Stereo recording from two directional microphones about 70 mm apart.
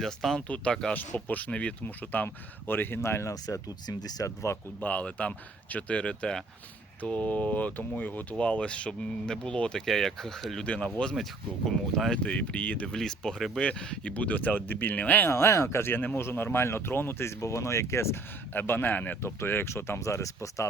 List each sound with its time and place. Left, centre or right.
0.0 s speech: centre
0.4 s speech: centre
0.9 s speech: left
3.4 s speech: left
4.5 s speech: left
4.8 s speech: left
10.7 s speech: centre
12.1 s speech: centre
13.0 s speech: centre; by 15.3 s left
15.3 s speech: left
19.2 s speech: left